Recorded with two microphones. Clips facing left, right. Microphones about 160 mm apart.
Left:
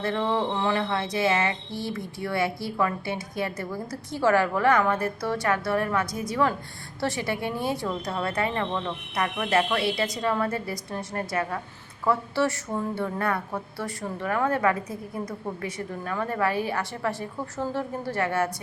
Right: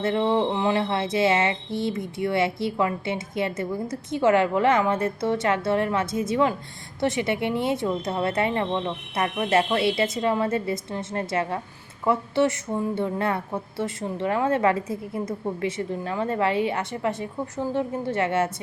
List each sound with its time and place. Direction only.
0.0 s a woman's voice: 25° right (ahead or behind)